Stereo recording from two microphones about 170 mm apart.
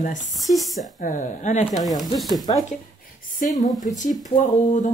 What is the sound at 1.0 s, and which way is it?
Speech, 50° left (ahead or behind).